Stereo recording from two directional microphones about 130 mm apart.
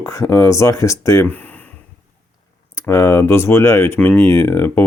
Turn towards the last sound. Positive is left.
turn(degrees=15)  # may be behind; listen again after turning